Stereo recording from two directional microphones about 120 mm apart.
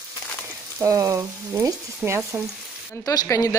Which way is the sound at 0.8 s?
25° right (ahead or behind).